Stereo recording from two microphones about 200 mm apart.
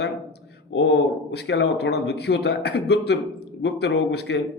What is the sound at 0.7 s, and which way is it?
Speech, 65° left (ahead or behind).